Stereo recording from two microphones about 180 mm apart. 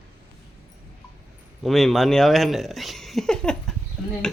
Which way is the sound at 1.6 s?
Centre (ahead or behind).